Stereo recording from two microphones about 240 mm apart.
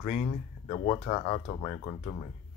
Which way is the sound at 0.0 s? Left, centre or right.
Left.